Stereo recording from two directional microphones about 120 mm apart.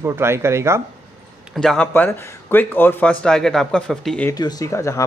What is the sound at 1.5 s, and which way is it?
Speech, 5° left (ahead or behind).